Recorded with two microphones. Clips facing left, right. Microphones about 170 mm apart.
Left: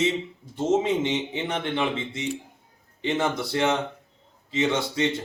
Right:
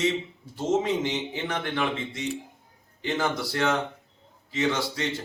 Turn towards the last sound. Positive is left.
turn(degrees=25)  # may be behind; listen again after turning